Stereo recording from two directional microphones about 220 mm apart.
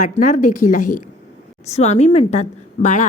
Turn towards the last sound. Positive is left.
turn(degrees=35)  # may be behind; listen again after turning